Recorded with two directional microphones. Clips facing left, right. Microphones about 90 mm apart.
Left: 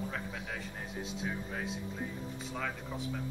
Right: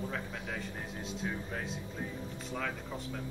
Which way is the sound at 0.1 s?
Centre (ahead or behind).